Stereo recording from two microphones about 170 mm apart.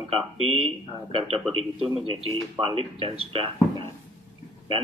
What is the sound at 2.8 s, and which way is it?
Speech, 35° right (ahead or behind).